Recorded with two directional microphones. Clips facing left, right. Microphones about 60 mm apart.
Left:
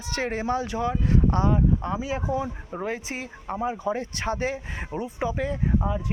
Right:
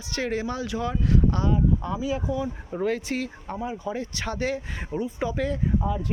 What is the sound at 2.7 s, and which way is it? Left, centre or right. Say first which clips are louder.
Speech: right 5 dB; centre.